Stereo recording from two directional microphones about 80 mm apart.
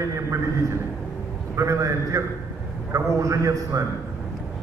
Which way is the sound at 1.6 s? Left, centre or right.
Right.